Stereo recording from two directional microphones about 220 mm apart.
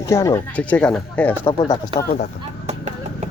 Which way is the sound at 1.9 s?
20° right (ahead or behind).